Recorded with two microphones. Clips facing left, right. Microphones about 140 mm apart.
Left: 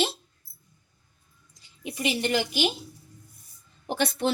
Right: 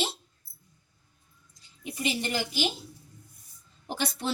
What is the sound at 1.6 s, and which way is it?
A woman's voice, 75° left (ahead or behind).